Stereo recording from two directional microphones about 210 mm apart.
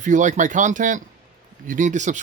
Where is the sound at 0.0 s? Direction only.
35° right (ahead or behind).